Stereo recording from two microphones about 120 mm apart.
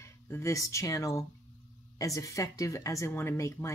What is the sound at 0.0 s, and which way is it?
Speech, 25° left (ahead or behind).